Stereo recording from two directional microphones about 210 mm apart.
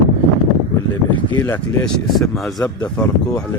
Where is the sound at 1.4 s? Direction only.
10° left (ahead or behind).